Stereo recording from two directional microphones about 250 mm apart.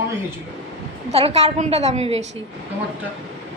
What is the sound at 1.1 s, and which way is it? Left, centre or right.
A woman's voice, right.